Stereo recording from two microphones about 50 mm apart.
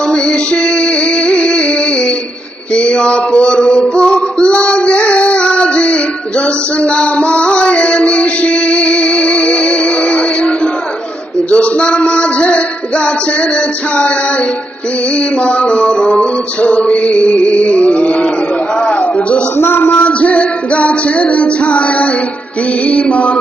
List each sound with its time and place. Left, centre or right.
0.1 s music: centre
2.7 s female singing: left
11.5 s music: left
15.4 s music: left
19.5 s a sound: left
19.9 s music: left